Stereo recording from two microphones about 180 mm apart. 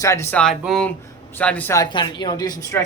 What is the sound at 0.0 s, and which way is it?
Speech, 15° left (ahead or behind).